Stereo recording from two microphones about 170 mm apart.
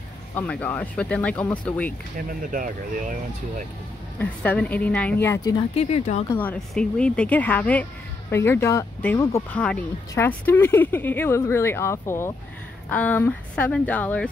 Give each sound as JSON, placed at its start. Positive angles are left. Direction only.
{"t": 0.3, "sound": "speech", "side_deg": 10}
{"t": 2.1, "sound": "speech", "side_deg": -55}
{"t": 4.2, "sound": "speech", "side_deg": 10}
{"t": 5.8, "sound": "speech", "side_deg": 40}
{"t": 6.2, "sound": "speech", "side_deg": 10}